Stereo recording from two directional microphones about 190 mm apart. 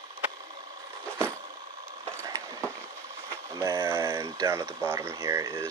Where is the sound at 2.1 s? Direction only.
15° right (ahead or behind).